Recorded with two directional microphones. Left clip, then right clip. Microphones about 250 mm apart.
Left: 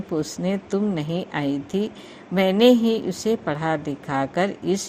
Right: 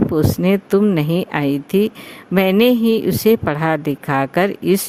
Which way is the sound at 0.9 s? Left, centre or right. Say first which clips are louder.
Right 8 dB; right.